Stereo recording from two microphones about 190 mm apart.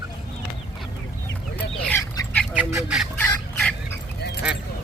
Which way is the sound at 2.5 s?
5° right (ahead or behind).